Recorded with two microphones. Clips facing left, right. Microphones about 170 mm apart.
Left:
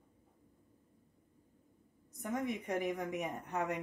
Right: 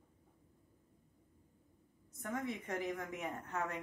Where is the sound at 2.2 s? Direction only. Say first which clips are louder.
Left 3 dB; 15° left (ahead or behind).